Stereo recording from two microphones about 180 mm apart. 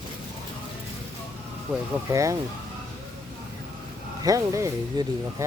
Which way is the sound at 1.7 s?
10° right (ahead or behind).